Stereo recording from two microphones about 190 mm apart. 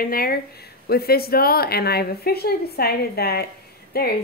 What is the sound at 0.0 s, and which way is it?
A woman's voice, 50° left (ahead or behind).